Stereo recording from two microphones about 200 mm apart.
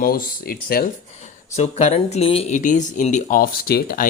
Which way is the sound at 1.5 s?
35° left (ahead or behind).